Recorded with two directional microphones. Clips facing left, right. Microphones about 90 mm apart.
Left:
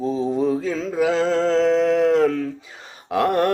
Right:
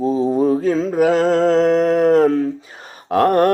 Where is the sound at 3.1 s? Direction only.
45° right (ahead or behind).